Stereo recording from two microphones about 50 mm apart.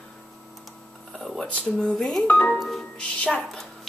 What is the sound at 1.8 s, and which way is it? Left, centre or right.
Speech, centre.